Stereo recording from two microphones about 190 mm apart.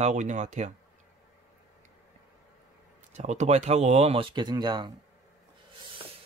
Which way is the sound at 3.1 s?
35° right (ahead or behind).